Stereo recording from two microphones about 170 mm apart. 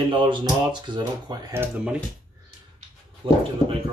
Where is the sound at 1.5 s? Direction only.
10° right (ahead or behind).